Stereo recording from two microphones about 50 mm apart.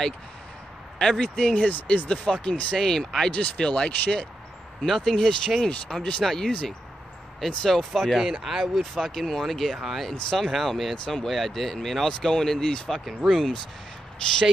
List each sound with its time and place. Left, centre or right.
0.9 s speech: centre
1.2 s speech: left
2.0 s speech: centre
4.8 s speech: centre
5.9 s speech: centre
6.2 s speech: centre
8.9 s speech: centre